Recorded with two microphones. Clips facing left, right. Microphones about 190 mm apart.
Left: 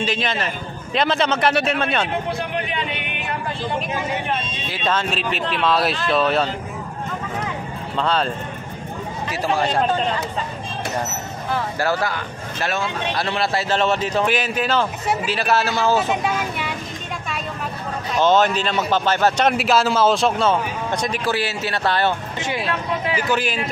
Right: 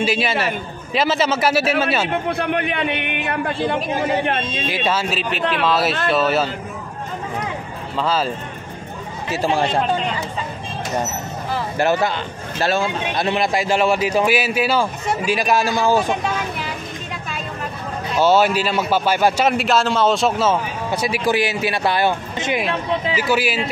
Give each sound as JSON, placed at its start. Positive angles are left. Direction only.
{"t": 0.0, "sound": "a man's voice", "side_deg": -10}
{"t": 2.3, "sound": "a man's voice", "side_deg": -60}
{"t": 4.6, "sound": "a man's voice", "side_deg": -10}
{"t": 8.0, "sound": "speech", "side_deg": -5}
{"t": 9.3, "sound": "speech", "side_deg": -30}
{"t": 11.8, "sound": "a man's voice", "side_deg": -20}
{"t": 16.1, "sound": "speech", "side_deg": 5}
{"t": 18.1, "sound": "a man's voice", "side_deg": -10}